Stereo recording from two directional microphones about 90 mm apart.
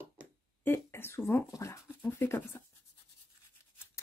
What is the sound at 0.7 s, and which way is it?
Speech, 25° left (ahead or behind).